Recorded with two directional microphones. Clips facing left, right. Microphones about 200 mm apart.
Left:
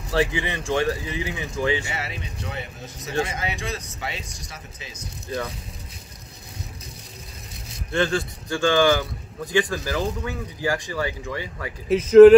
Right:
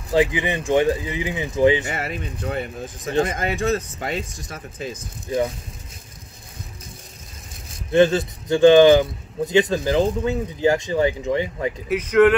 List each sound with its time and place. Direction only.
0.1 s speech: 15° right (ahead or behind)
1.9 s speech: 50° right (ahead or behind)
5.3 s speech: 15° right (ahead or behind)
7.9 s speech: 20° right (ahead or behind)
11.9 s speech: 25° left (ahead or behind)